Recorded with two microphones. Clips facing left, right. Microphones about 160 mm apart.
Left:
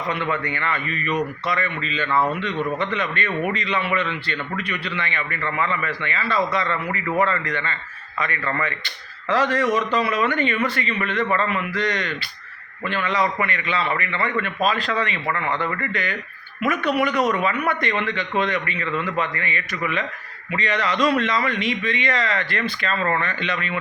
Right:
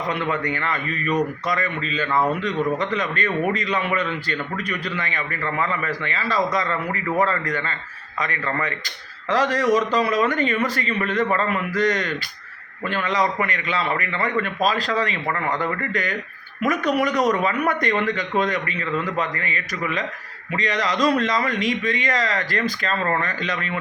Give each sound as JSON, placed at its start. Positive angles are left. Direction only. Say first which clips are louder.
{"t": 0.4, "sound": "a man's voice", "louder": "right 1 dB", "side_deg": -40}
{"t": 2.0, "sound": "a man's voice", "louder": "even", "side_deg": -15}
{"t": 2.6, "sound": "a man's voice", "louder": "right 1 dB", "side_deg": -40}